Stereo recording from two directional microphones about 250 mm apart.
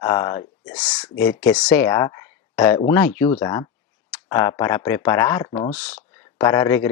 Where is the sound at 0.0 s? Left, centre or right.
Centre.